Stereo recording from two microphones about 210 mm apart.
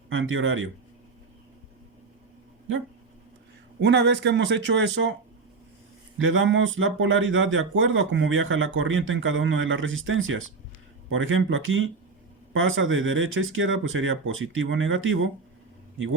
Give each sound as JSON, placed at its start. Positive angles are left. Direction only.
{"t": 0.1, "sound": "speech", "side_deg": -70}
{"t": 3.8, "sound": "a man's voice", "side_deg": -55}
{"t": 6.1, "sound": "speech", "side_deg": -65}